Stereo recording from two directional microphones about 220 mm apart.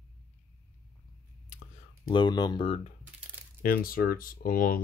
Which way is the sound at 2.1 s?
20° left (ahead or behind).